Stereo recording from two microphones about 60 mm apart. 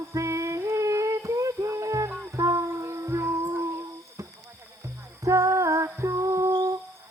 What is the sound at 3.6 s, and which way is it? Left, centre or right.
Humming, right.